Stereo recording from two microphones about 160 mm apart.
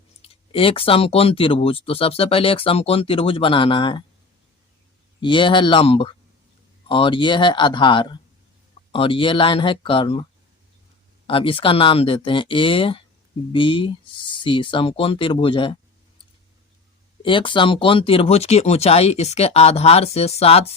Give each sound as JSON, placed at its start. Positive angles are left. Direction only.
{"t": 0.2, "sound": "speech", "side_deg": 35}
{"t": 5.2, "sound": "speech", "side_deg": 30}
{"t": 11.3, "sound": "speech", "side_deg": 35}
{"t": 17.2, "sound": "speech", "side_deg": 30}